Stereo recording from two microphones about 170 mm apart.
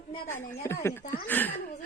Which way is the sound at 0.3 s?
15° left (ahead or behind).